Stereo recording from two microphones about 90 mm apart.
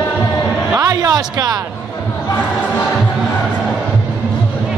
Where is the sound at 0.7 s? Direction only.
45° right (ahead or behind).